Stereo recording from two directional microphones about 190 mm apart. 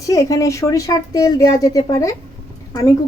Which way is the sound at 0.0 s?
15° left (ahead or behind).